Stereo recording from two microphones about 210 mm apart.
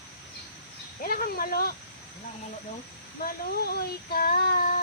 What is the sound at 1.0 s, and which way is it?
Speech, 45° left (ahead or behind).